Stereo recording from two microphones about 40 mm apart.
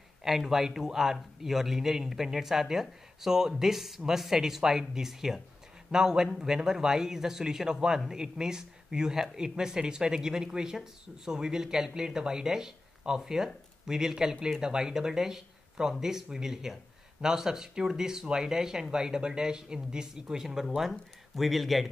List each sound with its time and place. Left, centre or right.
0.2 s a man's voice: centre
21.4 s speech: centre